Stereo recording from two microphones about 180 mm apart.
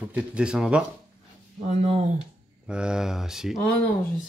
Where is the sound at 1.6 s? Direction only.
35° right (ahead or behind).